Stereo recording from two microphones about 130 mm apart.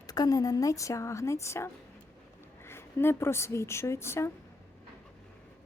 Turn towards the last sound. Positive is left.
turn(degrees=20)  # may be behind; listen again after turning